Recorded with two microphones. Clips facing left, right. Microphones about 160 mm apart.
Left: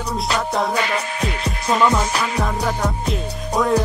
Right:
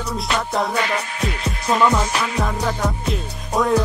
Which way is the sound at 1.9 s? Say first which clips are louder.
Even; centre (ahead or behind).